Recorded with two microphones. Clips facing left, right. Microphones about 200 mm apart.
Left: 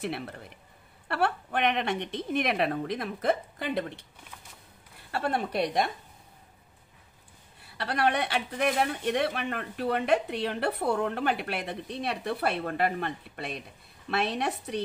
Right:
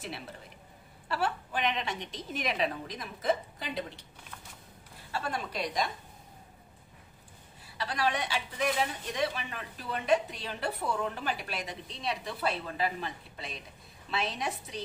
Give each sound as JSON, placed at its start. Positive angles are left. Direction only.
{"t": 0.0, "sound": "a woman's voice", "side_deg": 60}
{"t": 5.1, "sound": "a woman's voice", "side_deg": 60}
{"t": 7.6, "sound": "a woman's voice", "side_deg": 60}